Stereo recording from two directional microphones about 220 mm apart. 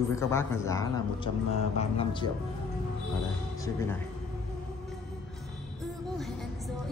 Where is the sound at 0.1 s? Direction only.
10° left (ahead or behind).